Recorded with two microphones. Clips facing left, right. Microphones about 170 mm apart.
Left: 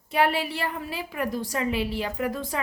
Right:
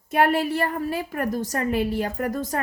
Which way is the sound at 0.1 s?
45° right (ahead or behind).